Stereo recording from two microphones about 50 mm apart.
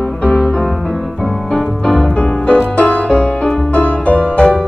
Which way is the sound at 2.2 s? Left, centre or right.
Left.